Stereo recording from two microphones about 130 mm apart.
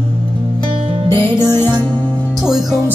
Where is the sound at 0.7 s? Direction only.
45° right (ahead or behind).